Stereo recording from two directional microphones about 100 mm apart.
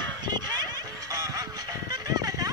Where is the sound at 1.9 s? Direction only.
40° right (ahead or behind).